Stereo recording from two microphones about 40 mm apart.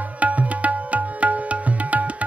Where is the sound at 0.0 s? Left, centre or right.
Right.